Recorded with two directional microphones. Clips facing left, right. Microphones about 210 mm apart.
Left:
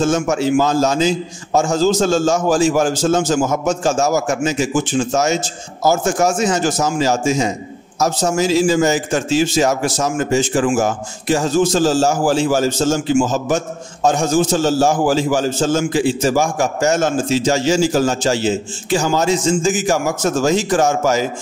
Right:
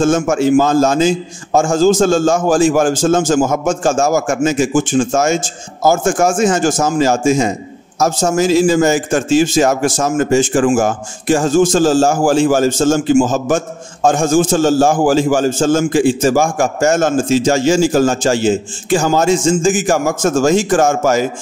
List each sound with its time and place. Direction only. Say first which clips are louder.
0.0 s a man's voice: right 3 dB; 50° right (ahead or behind)